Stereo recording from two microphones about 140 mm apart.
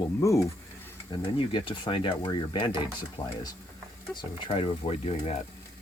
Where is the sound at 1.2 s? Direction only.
40° left (ahead or behind).